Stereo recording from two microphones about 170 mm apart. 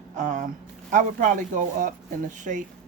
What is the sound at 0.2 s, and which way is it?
Speech, 45° right (ahead or behind).